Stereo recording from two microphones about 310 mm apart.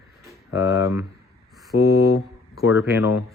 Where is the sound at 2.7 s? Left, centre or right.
Left.